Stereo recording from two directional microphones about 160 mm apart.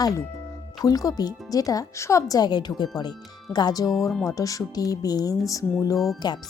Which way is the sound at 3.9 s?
Centre (ahead or behind).